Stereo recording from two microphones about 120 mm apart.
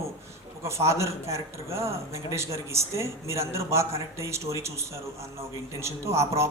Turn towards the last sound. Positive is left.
turn(degrees=-25)  # may be behind; listen again after turning